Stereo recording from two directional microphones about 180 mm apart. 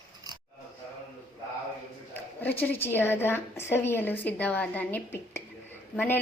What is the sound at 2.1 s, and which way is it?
A woman's voice, 10° left (ahead or behind).